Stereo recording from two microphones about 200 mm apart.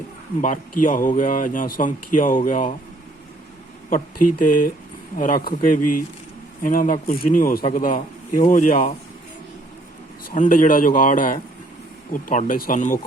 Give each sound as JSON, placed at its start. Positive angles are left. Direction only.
{"t": 0.4, "sound": "speech", "side_deg": 40}
{"t": 3.8, "sound": "a man's voice", "side_deg": 45}
{"t": 10.2, "sound": "a man's voice", "side_deg": 40}